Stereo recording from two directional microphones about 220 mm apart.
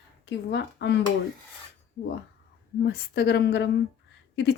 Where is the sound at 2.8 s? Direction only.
50° left (ahead or behind).